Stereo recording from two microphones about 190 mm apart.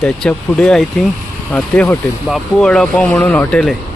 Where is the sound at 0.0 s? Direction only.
5° left (ahead or behind).